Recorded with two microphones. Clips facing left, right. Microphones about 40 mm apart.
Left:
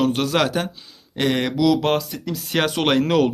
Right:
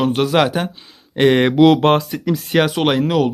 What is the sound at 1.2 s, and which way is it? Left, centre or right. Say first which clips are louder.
Speech: right 8 dB; right.